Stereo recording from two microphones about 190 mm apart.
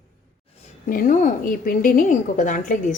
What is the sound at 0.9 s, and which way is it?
A woman's voice, 45° left (ahead or behind).